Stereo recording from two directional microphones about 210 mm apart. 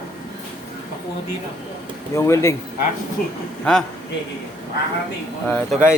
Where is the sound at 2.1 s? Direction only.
15° left (ahead or behind).